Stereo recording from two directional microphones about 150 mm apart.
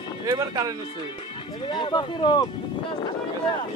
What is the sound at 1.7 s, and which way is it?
Speech, 30° left (ahead or behind).